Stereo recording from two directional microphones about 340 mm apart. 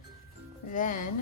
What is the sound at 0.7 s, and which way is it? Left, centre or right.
Speech, left.